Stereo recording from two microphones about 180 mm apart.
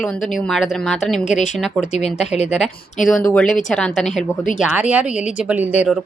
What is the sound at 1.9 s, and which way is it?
Speech, 35° left (ahead or behind).